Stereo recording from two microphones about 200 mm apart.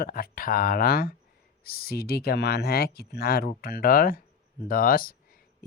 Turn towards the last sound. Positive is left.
turn(degrees=45)  # may be behind; listen again after turning